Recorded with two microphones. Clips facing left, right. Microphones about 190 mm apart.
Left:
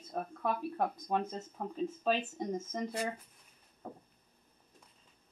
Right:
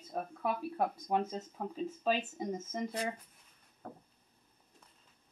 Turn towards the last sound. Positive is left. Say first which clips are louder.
# left 2 dB
turn(degrees=10)  # may be behind; listen again after turning